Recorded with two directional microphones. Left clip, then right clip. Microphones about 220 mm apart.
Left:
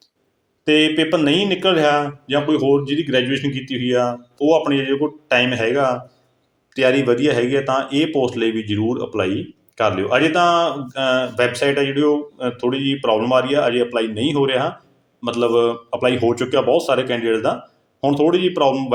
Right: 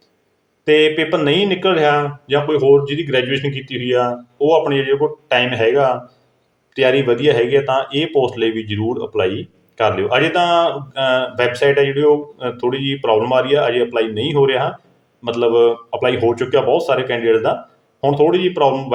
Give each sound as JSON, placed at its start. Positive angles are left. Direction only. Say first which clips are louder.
{"t": 0.6, "sound": "speech", "louder": "right 3 dB", "side_deg": 20}